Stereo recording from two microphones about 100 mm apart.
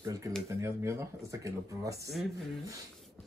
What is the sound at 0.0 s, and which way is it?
Speech, 30° right (ahead or behind).